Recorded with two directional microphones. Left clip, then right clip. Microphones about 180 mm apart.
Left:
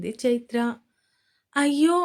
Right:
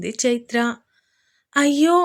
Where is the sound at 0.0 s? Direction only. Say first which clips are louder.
Right 3 dB; 25° right (ahead or behind).